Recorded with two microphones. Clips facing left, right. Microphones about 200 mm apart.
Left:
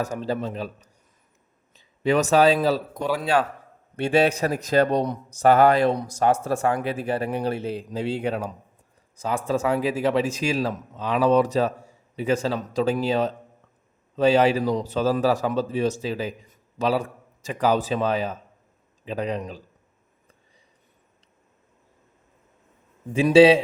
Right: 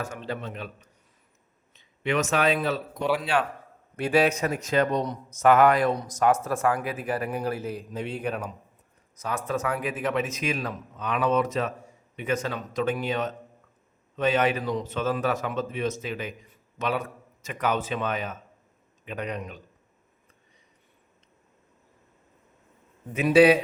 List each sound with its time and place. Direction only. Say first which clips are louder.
0.1 s a man's voice: left 7 dB; 35° left (ahead or behind)
3.9 s a man's voice: left 2 dB; 25° left (ahead or behind)
23.1 s speech: left 4 dB; 25° left (ahead or behind)